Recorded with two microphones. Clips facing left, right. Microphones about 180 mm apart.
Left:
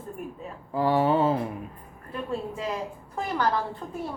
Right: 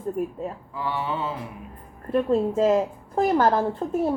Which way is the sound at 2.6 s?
45° right (ahead or behind).